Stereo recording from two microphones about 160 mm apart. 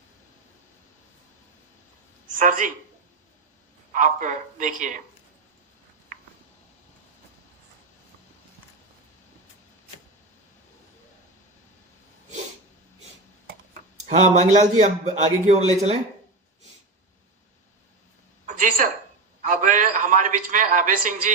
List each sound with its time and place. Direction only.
2.4 s speech: 55° right (ahead or behind)
3.9 s a man's voice: 50° right (ahead or behind)
13.9 s a man's voice: 50° right (ahead or behind)
18.4 s a sound: 55° right (ahead or behind)
19.5 s a man's voice: 55° right (ahead or behind)